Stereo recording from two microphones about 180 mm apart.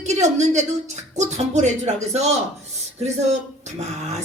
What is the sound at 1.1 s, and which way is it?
Speech, 40° right (ahead or behind).